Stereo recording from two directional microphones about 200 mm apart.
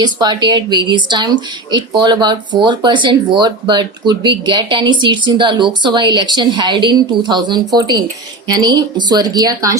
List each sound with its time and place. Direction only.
0.0 s speech: 20° right (ahead or behind)